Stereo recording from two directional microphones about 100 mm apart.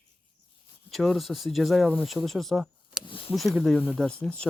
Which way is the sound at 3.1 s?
60° left (ahead or behind).